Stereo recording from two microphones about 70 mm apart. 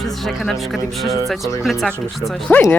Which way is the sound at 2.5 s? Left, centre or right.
Left.